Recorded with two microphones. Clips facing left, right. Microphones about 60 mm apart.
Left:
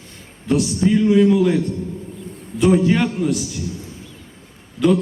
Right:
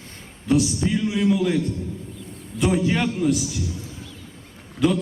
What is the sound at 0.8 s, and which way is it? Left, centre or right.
Speech, centre.